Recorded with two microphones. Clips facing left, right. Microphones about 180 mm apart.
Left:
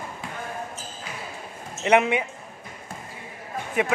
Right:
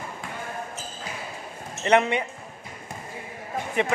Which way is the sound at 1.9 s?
5° left (ahead or behind).